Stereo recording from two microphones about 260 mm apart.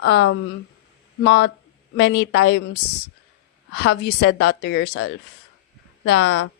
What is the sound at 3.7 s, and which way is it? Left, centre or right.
Speech, left.